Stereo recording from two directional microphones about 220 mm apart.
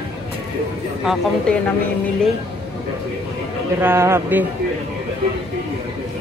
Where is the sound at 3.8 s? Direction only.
10° right (ahead or behind).